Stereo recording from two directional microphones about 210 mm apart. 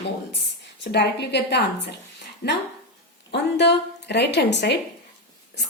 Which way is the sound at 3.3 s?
55° left (ahead or behind).